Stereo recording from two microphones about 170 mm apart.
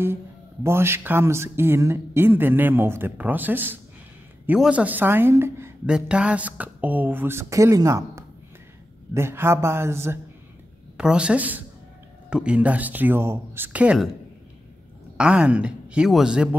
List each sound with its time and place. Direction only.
0.7 s speech: 15° right (ahead or behind)
15.1 s speech: 5° right (ahead or behind)